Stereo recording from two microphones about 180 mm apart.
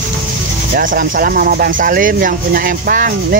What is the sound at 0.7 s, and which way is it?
Speech, 50° right (ahead or behind).